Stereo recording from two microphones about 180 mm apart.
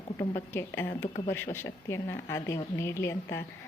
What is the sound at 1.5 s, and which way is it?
A woman's voice, 15° left (ahead or behind).